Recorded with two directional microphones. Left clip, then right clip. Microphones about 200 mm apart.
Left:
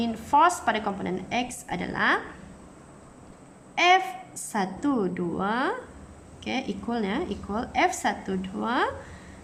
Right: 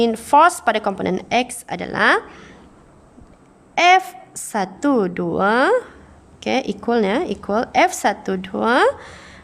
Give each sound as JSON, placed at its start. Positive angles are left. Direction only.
{"t": 0.0, "sound": "a woman's voice", "side_deg": -50}
{"t": 3.8, "sound": "a woman's voice", "side_deg": -50}